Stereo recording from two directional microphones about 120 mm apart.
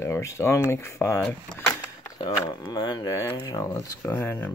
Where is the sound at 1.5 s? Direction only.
20° left (ahead or behind).